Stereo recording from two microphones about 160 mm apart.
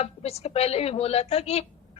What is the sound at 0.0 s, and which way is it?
A woman's voice, 40° left (ahead or behind).